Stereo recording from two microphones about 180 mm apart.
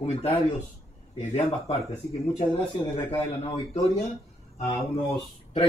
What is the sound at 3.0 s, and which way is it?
Speech, 30° left (ahead or behind).